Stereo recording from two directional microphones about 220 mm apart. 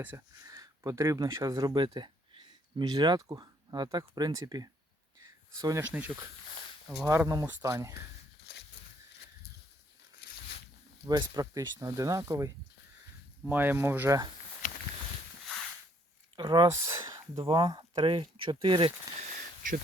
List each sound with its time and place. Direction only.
0.0 s speech: 10° right (ahead or behind)
11.0 s speech: 20° right (ahead or behind)
16.3 s speech: 20° right (ahead or behind)